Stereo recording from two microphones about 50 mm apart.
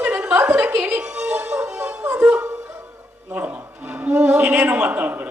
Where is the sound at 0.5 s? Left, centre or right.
Right.